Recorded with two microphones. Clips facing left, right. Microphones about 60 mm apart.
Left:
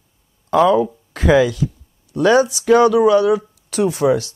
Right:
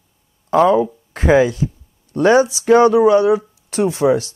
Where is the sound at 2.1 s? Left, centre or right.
Right.